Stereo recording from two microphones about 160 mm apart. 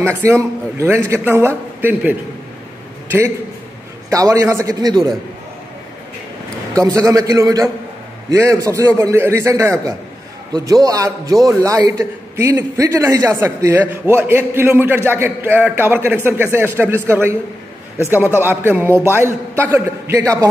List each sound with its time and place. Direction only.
0.0 s a man's voice: 15° right (ahead or behind)
4.1 s a man's voice: 20° right (ahead or behind)
6.7 s a man's voice: 20° right (ahead or behind)